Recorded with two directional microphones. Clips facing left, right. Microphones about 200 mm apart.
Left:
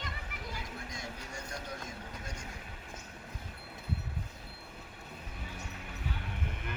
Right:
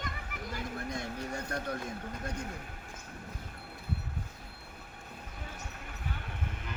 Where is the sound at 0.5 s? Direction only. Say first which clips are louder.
Right 6 dB; 60° right (ahead or behind).